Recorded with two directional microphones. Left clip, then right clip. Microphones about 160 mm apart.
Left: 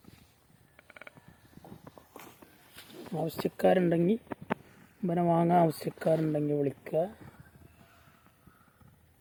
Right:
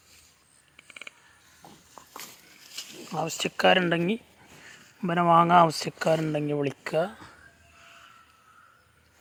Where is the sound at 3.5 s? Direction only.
35° left (ahead or behind).